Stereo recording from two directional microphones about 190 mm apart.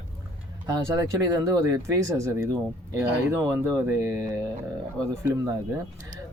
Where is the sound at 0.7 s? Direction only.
15° right (ahead or behind).